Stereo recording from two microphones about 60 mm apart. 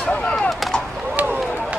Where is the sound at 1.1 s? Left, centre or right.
Right.